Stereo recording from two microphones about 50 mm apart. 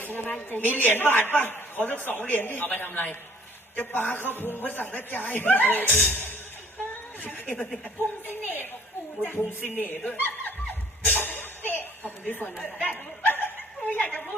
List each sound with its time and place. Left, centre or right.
0.0 s a woman's voice: left
9.2 s a woman's voice: left
11.0 s a sound: left
12.3 s a woman's voice: left